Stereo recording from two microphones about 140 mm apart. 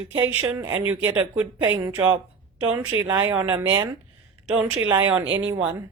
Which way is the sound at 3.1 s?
15° right (ahead or behind).